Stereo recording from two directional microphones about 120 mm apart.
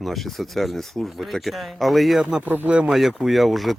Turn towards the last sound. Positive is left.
turn(degrees=0)  # may be behind; listen again after turning